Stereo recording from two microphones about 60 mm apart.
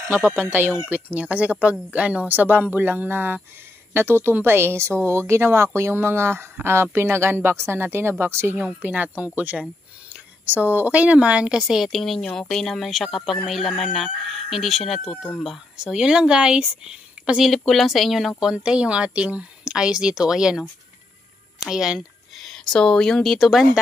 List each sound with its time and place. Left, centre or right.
0.5 s a woman's voice: right
1.1 s a woman's voice: right
8.8 s a woman's voice: right; by 17.5 s centre
17.5 s speech: centre
18.4 s speech: centre
22.4 s speech: centre
23.3 s speech: centre